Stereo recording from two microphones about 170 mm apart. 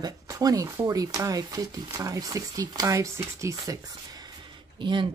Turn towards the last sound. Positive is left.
turn(degrees=-30)  # may be behind; listen again after turning